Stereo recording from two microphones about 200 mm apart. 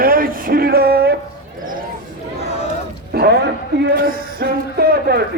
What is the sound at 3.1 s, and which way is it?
Speech, 55° right (ahead or behind).